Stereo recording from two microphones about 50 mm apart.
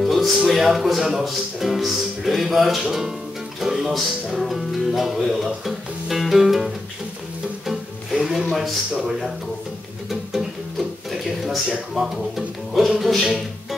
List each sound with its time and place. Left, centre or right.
0.0 s speech: centre
7.6 s music: centre
10.0 s music: centre
13.0 s speech: centre